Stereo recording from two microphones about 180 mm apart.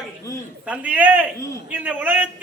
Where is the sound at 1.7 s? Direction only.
10° right (ahead or behind).